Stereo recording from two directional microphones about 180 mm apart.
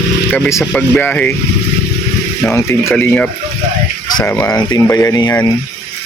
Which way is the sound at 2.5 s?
15° left (ahead or behind).